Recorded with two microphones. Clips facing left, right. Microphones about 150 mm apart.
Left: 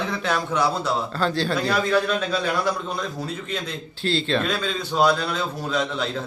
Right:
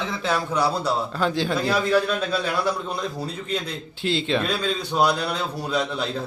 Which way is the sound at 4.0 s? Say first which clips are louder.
Even; 15° right (ahead or behind).